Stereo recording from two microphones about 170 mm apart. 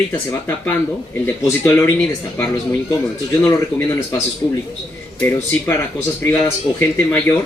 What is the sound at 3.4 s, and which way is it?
A man's voice, 15° left (ahead or behind).